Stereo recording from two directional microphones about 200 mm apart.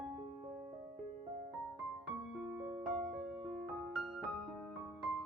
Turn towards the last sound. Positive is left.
turn(degrees=5)  # may be behind; listen again after turning